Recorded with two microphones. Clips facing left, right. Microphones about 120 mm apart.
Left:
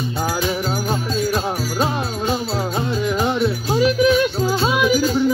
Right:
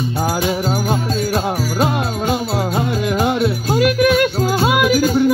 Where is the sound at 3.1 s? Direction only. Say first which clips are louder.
Right 2 dB; 10° right (ahead or behind).